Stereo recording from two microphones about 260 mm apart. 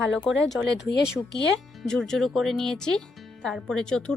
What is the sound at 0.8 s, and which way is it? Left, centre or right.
Speech, left.